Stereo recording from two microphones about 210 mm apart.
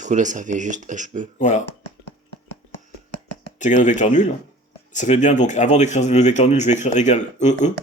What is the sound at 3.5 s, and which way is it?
Speech, 35° left (ahead or behind).